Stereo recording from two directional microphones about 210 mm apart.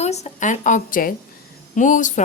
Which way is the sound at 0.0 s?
30° left (ahead or behind).